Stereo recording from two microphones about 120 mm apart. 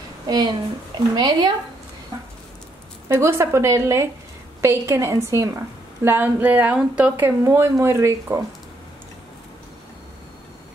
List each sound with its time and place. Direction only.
0.3 s speech: 35° right (ahead or behind)
3.1 s speech: 20° right (ahead or behind)